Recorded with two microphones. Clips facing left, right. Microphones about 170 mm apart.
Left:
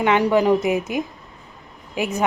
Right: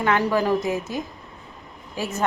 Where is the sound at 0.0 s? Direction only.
20° left (ahead or behind).